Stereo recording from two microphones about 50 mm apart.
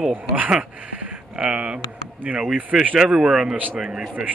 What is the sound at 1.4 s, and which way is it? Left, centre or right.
Speech, right.